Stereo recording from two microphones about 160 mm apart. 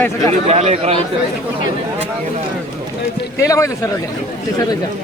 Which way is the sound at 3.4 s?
20° left (ahead or behind).